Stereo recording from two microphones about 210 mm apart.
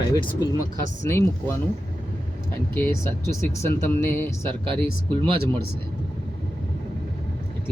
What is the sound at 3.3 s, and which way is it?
Speech, 15° left (ahead or behind).